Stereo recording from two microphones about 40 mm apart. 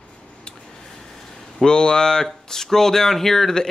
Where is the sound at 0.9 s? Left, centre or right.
Centre.